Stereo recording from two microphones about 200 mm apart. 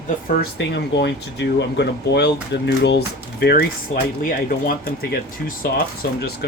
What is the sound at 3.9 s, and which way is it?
Speech, 35° left (ahead or behind).